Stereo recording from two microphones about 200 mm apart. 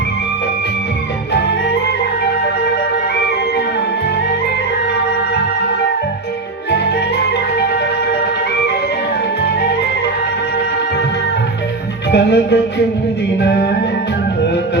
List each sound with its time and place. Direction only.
12.1 s music: 60° left (ahead or behind)